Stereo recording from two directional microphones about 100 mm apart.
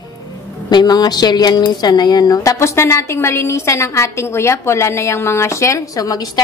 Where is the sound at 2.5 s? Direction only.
25° left (ahead or behind).